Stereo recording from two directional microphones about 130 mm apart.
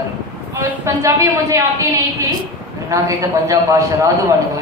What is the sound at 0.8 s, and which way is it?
Speech, 25° right (ahead or behind).